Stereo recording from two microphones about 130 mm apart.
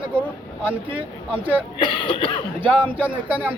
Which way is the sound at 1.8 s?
35° left (ahead or behind).